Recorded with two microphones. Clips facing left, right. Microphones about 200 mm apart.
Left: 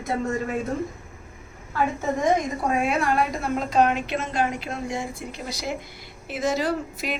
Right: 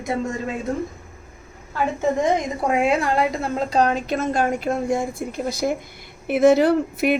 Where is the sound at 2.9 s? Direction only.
25° right (ahead or behind); by 5.7 s 50° right (ahead or behind).